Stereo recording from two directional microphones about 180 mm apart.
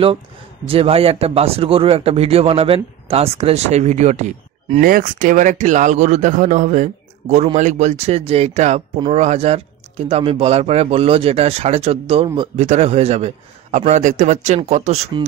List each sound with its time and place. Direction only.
0.7 s speech: 35° right (ahead or behind)